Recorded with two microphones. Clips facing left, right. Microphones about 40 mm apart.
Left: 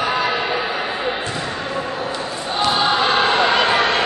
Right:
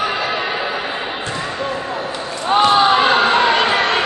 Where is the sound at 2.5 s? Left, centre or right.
Right.